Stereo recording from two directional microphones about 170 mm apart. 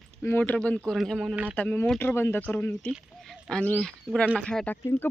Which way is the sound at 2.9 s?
Centre (ahead or behind).